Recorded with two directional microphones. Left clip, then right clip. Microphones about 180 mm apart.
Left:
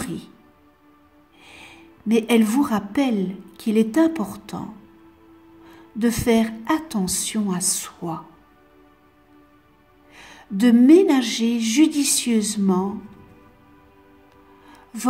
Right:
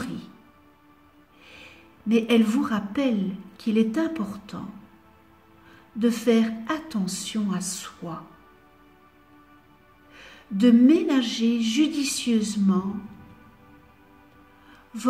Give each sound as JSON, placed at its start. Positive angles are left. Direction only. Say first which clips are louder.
{"t": 1.4, "sound": "a woman's voice", "louder": "left 3 dB", "side_deg": 60}
{"t": 5.9, "sound": "a woman's voice", "louder": "left 2 dB", "side_deg": 55}
{"t": 10.1, "sound": "a woman's voice", "louder": "left 2 dB", "side_deg": 55}
{"t": 14.7, "sound": "a sound", "louder": "left 4 dB", "side_deg": 55}